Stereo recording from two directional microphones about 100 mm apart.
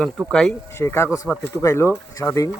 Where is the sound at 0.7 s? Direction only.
25° left (ahead or behind).